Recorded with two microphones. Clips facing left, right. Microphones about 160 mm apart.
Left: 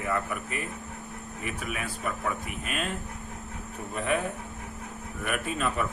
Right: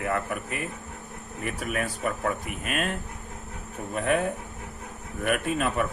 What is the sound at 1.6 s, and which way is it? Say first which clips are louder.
Speech: right 6 dB; 45° right (ahead or behind).